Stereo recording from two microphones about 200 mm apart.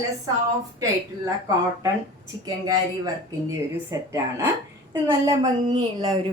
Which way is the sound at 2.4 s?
20° right (ahead or behind).